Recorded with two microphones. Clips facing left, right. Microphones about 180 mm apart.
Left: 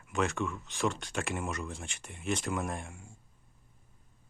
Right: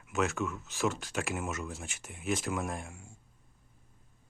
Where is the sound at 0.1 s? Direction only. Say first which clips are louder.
Even; centre (ahead or behind).